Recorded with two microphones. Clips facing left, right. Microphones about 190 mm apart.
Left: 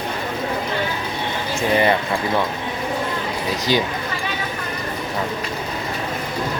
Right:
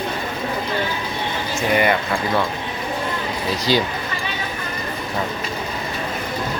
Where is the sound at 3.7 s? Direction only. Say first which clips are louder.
Right 1 dB; 15° left (ahead or behind).